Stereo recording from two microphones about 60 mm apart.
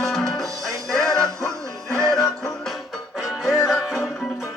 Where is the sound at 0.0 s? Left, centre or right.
Centre.